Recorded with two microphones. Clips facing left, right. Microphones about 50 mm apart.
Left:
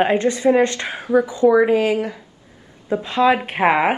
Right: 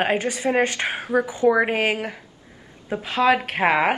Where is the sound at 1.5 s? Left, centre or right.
Right.